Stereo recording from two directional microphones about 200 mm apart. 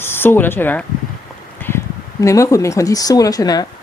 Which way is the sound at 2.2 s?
15° left (ahead or behind).